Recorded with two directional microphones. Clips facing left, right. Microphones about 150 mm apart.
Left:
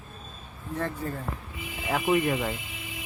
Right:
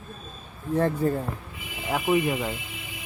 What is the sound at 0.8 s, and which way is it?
Speech, 35° right (ahead or behind).